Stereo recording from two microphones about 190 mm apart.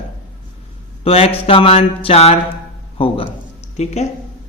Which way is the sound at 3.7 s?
35° left (ahead or behind).